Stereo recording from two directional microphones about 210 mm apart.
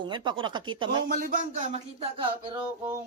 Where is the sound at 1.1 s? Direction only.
45° right (ahead or behind); by 2.5 s 25° right (ahead or behind).